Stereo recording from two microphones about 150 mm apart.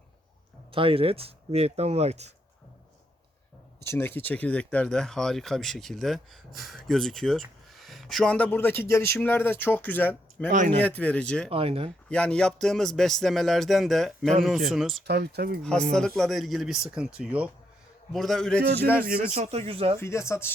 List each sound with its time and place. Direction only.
0.7 s speech: 35° right (ahead or behind)
3.8 s speech: 15° left (ahead or behind)
10.5 s speech: 55° right (ahead or behind)
10.8 s speech: 10° left (ahead or behind)
11.5 s speech: 40° right (ahead or behind)
12.0 s speech: 5° left (ahead or behind)
15.0 s speech: 90° right
15.6 s speech: 5° left (ahead or behind)
18.6 s speech: 90° right
19.3 s speech: 45° right (ahead or behind)
20.0 s speech: 20° left (ahead or behind)